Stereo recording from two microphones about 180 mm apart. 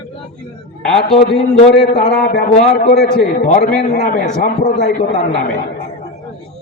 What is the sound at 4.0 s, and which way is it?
Speech, 45° left (ahead or behind).